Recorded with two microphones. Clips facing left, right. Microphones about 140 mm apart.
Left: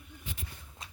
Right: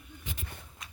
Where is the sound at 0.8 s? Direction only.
30° left (ahead or behind).